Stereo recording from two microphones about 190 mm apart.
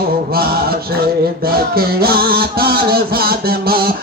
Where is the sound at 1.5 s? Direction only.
55° right (ahead or behind).